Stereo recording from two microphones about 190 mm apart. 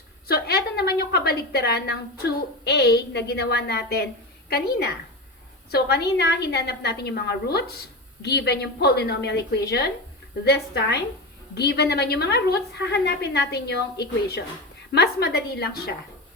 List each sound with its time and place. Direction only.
0.3 s a woman's voice: 55° left (ahead or behind)